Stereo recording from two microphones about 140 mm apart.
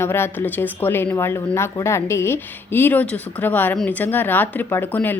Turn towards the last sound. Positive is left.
turn(degrees=15)  # may be behind; listen again after turning